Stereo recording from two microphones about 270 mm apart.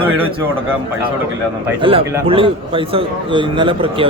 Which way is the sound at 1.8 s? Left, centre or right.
Centre.